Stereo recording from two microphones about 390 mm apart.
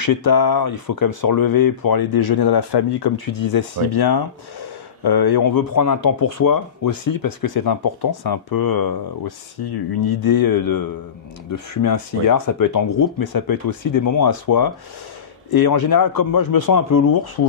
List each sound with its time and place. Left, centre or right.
0.0 s speech: left